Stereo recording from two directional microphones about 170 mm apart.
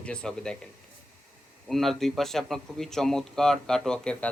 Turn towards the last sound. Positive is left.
turn(degrees=5)  # may be behind; listen again after turning